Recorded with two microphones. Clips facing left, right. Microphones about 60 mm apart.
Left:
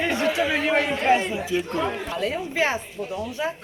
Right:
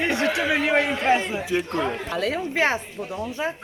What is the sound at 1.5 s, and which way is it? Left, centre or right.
Speech, right.